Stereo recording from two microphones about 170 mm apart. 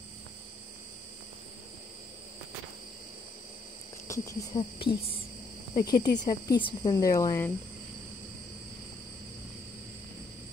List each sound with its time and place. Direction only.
4.1 s speech: 20° left (ahead or behind)